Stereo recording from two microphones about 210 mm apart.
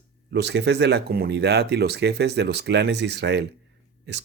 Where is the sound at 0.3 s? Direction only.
55° right (ahead or behind).